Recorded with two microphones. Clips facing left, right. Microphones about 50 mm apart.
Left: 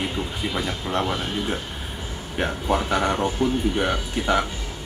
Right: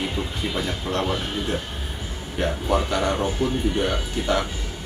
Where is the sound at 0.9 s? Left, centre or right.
Centre.